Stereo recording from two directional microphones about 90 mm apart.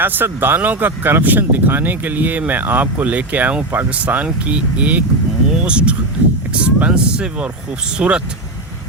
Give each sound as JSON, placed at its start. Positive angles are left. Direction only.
{"t": 0.0, "sound": "speech", "side_deg": -20}